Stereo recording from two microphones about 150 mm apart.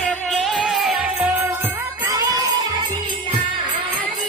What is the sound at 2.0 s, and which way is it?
Jingle bell, 20° right (ahead or behind).